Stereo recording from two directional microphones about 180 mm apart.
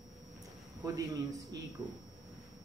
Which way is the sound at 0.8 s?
20° right (ahead or behind).